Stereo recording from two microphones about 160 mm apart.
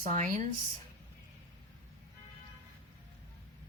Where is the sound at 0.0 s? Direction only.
50° right (ahead or behind).